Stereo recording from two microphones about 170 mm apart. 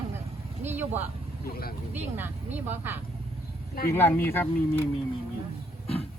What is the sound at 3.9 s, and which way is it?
Speech, 15° left (ahead or behind).